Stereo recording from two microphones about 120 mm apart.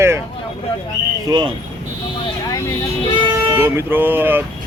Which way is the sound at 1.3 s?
35° right (ahead or behind).